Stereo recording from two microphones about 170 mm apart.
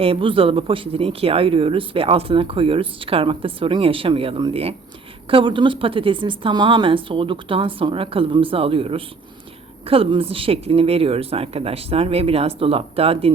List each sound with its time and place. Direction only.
0.0 s speech: 30° right (ahead or behind)